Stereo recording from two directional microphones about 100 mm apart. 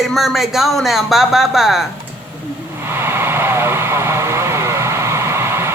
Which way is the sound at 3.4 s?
25° right (ahead or behind).